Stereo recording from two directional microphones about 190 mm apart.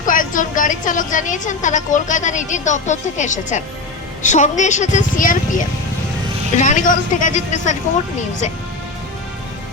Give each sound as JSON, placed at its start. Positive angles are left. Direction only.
{"t": 0.0, "sound": "a woman's voice", "side_deg": 45}